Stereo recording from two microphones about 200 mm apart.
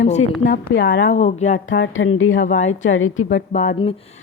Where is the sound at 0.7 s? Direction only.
65° left (ahead or behind).